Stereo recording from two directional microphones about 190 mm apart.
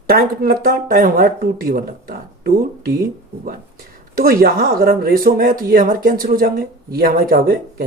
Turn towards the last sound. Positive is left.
turn(degrees=-50)  # may be behind; listen again after turning